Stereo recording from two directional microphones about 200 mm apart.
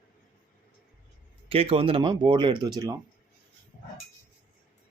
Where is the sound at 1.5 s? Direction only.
30° right (ahead or behind).